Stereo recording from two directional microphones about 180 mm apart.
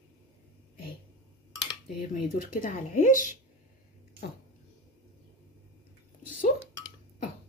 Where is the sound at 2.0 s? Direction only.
50° left (ahead or behind).